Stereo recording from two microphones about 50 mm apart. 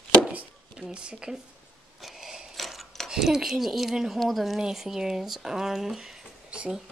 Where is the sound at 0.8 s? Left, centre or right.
Right.